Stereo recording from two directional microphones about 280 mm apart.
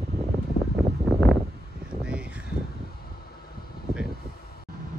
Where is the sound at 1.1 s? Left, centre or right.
Centre.